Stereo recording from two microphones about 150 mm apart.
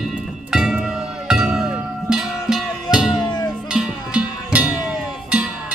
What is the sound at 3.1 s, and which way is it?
Music, 30° left (ahead or behind).